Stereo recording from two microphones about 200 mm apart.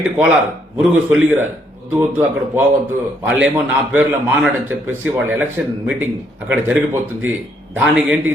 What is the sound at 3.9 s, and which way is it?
Speech, 10° right (ahead or behind).